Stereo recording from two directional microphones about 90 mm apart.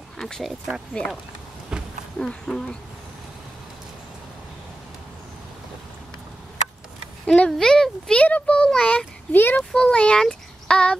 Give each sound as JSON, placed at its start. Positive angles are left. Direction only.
{"t": 0.2, "sound": "speech", "side_deg": 5}
{"t": 1.7, "sound": "a sound", "side_deg": -10}
{"t": 2.1, "sound": "a child's voice", "side_deg": 5}
{"t": 7.2, "sound": "a child's voice", "side_deg": 10}
{"t": 9.3, "sound": "speech", "side_deg": 20}
{"t": 9.6, "sound": "speech", "side_deg": 10}